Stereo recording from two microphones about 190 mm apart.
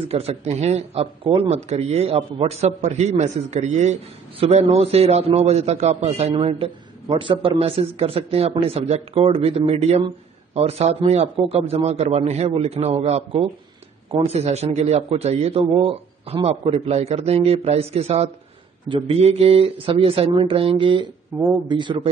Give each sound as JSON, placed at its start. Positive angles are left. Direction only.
{"t": 0.1, "sound": "speech", "side_deg": -35}